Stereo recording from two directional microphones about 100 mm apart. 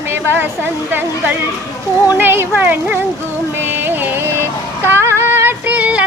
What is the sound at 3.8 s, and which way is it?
Music, 25° right (ahead or behind).